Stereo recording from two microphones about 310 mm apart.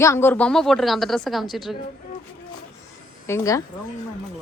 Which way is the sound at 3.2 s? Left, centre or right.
Centre.